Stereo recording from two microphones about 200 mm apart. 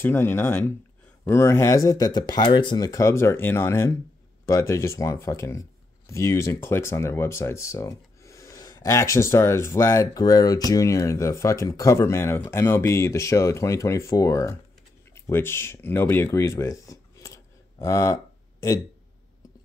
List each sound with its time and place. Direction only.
0.0 s speech: 10° left (ahead or behind)